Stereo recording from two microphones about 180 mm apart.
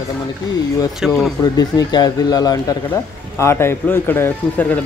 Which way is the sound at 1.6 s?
20° left (ahead or behind).